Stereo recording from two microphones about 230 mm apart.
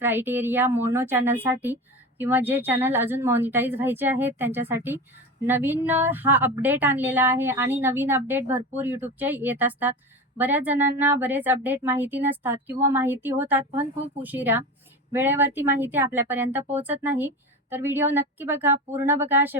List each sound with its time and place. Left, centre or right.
0.0 s a woman's voice: centre